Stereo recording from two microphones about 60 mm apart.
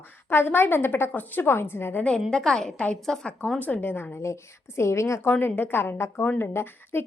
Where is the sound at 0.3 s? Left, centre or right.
Left.